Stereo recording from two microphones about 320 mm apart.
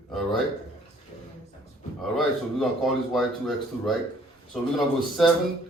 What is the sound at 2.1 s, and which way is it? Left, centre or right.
Speech, centre.